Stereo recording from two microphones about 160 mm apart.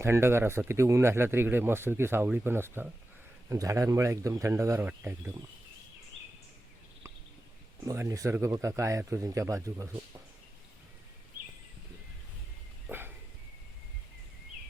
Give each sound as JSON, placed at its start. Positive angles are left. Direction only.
{"t": 0.0, "sound": "speech", "side_deg": -15}
{"t": 7.9, "sound": "speech", "side_deg": -20}
{"t": 12.9, "sound": "a sound", "side_deg": -15}